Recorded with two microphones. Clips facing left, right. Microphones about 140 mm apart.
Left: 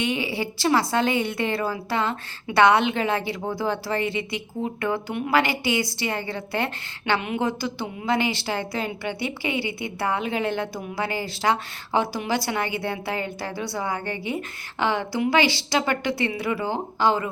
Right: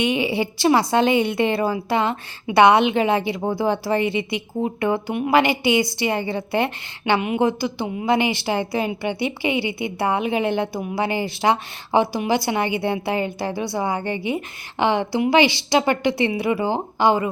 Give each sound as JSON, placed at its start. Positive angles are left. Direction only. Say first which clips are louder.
{"t": 0.0, "sound": "a woman's voice", "louder": "right 5 dB", "side_deg": -20}